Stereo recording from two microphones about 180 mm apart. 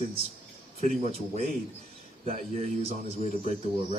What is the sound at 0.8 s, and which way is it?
Speech, 40° right (ahead or behind).